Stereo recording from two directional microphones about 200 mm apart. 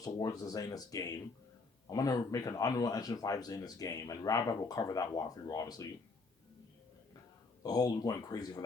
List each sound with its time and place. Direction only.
0.0 s speech: 15° left (ahead or behind)
7.6 s speech: 20° left (ahead or behind)